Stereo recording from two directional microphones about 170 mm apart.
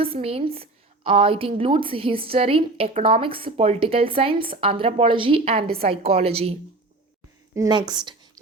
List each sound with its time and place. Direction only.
0.0 s a woman's voice: 35° right (ahead or behind)
7.5 s a woman's voice: 25° right (ahead or behind)